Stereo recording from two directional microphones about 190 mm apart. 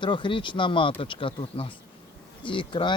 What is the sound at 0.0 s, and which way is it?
Speech, 25° left (ahead or behind).